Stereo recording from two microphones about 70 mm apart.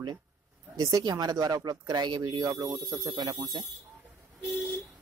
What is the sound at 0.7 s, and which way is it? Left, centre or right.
Speech, right.